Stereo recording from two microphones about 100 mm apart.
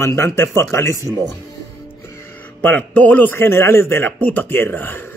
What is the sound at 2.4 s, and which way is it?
A man's voice, 15° left (ahead or behind).